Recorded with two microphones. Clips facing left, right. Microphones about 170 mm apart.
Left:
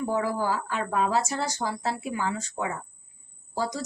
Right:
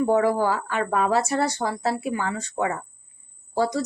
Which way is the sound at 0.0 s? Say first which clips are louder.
Right 7 dB; 65° right (ahead or behind).